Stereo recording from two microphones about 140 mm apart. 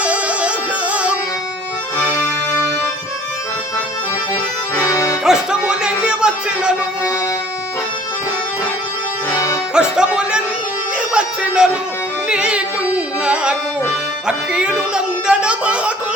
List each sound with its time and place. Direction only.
0.0 s music: 10° right (ahead or behind)
2.0 s accordion: 15° left (ahead or behind)
4.7 s accordion: 20° left (ahead or behind)
5.2 s music: 5° right (ahead or behind)
9.3 s accordion: 20° left (ahead or behind)
9.7 s music: 5° right (ahead or behind)
12.3 s carnatic music: 5° right (ahead or behind)
14.3 s music: 10° right (ahead or behind)